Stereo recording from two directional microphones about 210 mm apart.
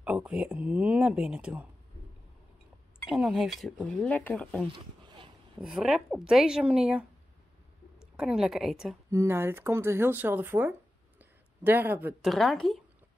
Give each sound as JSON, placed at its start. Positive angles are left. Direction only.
{"t": 0.0, "sound": "speech", "side_deg": -5}
{"t": 3.1, "sound": "speech", "side_deg": -5}
{"t": 4.7, "sound": "a sound", "side_deg": -20}
{"t": 5.6, "sound": "speech", "side_deg": -5}
{"t": 8.2, "sound": "speech", "side_deg": -5}
{"t": 9.1, "sound": "speech", "side_deg": -10}